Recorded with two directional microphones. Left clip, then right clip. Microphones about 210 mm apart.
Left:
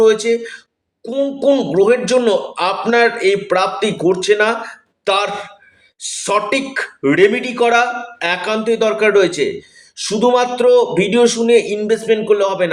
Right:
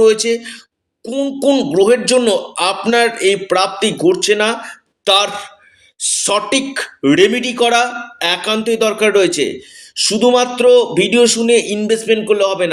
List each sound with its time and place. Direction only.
0.0 s speech: 35° right (ahead or behind)